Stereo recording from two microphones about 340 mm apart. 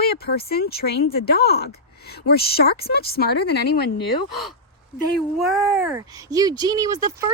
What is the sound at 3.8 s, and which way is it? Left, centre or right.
Speech, left.